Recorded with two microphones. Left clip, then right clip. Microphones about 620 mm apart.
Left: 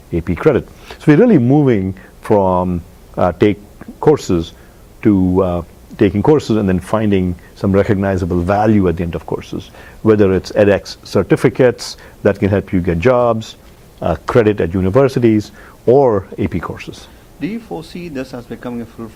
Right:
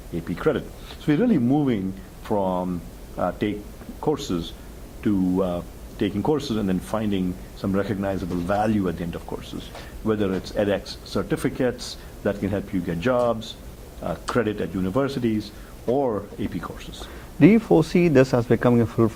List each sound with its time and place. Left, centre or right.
0.3 s speech: left
17.4 s speech: right